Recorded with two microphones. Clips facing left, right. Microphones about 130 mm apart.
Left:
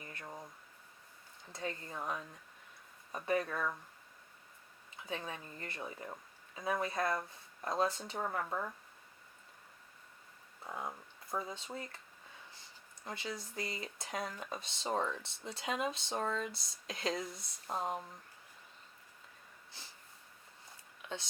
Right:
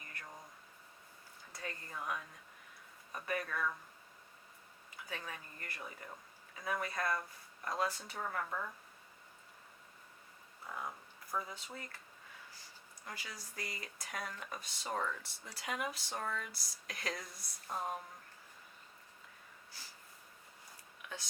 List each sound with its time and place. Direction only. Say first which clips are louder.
0.0 s a sound: left 4 dB; 25° left (ahead or behind)
1.5 s speech: left 4 dB; 25° left (ahead or behind)
5.0 s speech: left 5 dB; 25° left (ahead or behind)
10.6 s speech: left 2 dB; 25° left (ahead or behind)
13.1 s speech: left 7 dB; 25° left (ahead or behind)
19.7 s snort: left 1 dB; 25° left (ahead or behind)
21.0 s a sound: left 5 dB; 25° left (ahead or behind)